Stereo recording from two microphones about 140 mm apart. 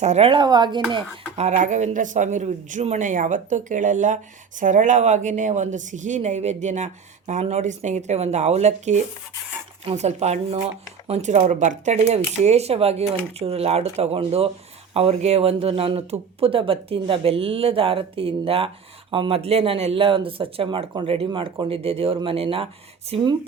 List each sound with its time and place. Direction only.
0.0 s speech: 55° right (ahead or behind)
0.3 s speech: 30° right (ahead or behind)
1.4 s speech: 55° right (ahead or behind); by 23.3 s 40° right (ahead or behind)